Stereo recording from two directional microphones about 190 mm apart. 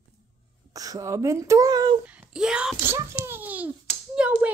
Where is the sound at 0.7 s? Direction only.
20° right (ahead or behind).